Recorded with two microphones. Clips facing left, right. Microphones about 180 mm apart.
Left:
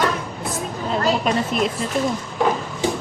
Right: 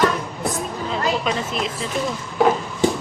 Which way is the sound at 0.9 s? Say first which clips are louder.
Left 3 dB; 45° left (ahead or behind).